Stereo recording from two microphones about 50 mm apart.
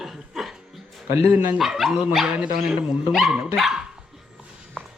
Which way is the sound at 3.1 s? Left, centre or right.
Centre.